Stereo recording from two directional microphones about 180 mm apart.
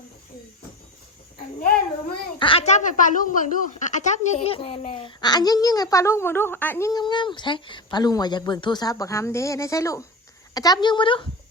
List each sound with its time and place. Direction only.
2.4 s speech: 30° left (ahead or behind)